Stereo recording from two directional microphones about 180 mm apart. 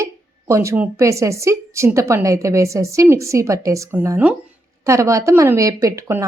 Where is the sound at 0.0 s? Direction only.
15° right (ahead or behind).